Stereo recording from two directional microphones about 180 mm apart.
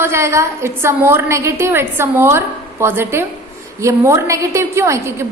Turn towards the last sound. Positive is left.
turn(degrees=-15)  # may be behind; listen again after turning